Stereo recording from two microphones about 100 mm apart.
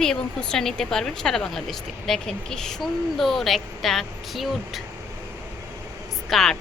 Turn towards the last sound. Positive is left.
turn(degrees=5)  # may be behind; listen again after turning